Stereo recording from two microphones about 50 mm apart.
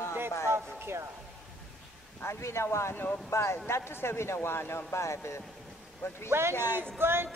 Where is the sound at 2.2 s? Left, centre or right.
Left.